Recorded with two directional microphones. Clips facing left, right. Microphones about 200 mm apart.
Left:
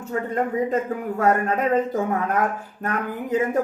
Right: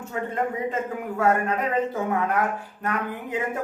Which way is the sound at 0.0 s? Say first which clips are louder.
Left 3 dB; 40° left (ahead or behind).